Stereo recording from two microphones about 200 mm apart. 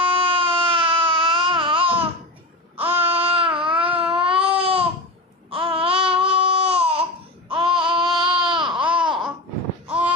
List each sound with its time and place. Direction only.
0.0 s baby cry: 30° right (ahead or behind)
3.1 s a sound: 30° right (ahead or behind)
4.2 s baby cry: 25° right (ahead or behind)
5.5 s babbling: 25° right (ahead or behind)
8.5 s baby cry: centre (ahead or behind)
8.9 s babbling: 5° right (ahead or behind)